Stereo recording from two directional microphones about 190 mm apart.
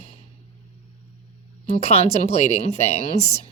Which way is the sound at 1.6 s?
35° left (ahead or behind).